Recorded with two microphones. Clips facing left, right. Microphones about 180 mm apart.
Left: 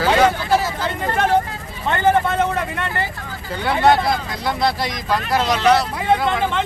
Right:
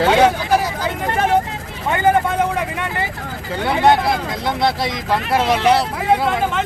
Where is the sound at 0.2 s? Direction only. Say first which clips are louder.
Right 2 dB; 10° right (ahead or behind).